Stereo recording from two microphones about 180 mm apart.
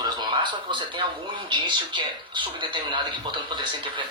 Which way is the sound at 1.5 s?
25° right (ahead or behind).